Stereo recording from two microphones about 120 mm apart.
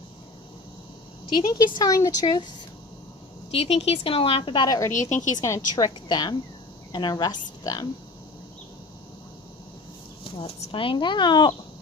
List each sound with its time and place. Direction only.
1.4 s speech: 35° left (ahead or behind)
3.5 s a woman's voice: 55° left (ahead or behind)
4.6 s speech: 30° left (ahead or behind)
5.0 s a woman's voice: 90° left
5.4 s speech: 35° left (ahead or behind)
10.2 s speech: 50° left (ahead or behind)